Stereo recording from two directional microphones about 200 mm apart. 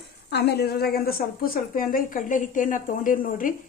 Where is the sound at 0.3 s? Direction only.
55° left (ahead or behind).